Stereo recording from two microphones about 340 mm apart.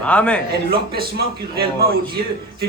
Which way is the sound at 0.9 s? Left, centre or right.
Right.